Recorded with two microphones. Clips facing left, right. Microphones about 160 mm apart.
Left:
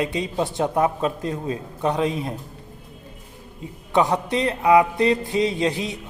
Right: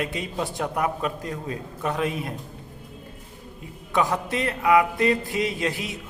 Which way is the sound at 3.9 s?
20° left (ahead or behind).